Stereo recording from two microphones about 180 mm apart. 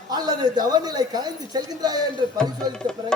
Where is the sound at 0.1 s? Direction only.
20° right (ahead or behind).